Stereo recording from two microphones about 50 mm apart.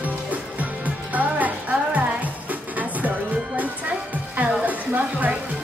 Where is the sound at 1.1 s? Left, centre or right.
Right.